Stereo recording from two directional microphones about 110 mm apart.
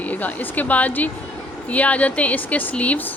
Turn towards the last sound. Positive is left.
turn(degrees=15)  # may be behind; listen again after turning